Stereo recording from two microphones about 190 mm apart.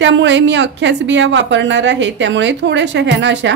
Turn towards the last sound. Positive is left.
turn(degrees=-70)  # may be behind; listen again after turning